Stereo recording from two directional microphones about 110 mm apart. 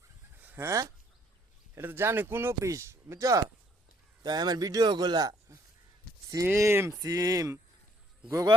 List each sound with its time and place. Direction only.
0.3 s a sound: 20° right (ahead or behind)
1.7 s speech: 20° right (ahead or behind); by 5.5 s 35° right (ahead or behind)
6.4 s speech: 20° right (ahead or behind)
7.0 s speech: 35° right (ahead or behind)